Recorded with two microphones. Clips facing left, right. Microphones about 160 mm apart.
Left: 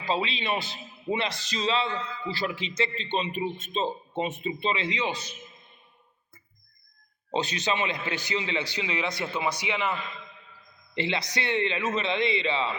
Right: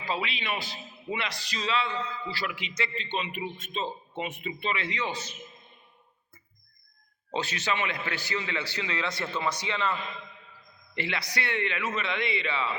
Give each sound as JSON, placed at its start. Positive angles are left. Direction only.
{"t": 0.0, "sound": "a man's voice", "side_deg": 25}
{"t": 7.3, "sound": "a man's voice", "side_deg": 20}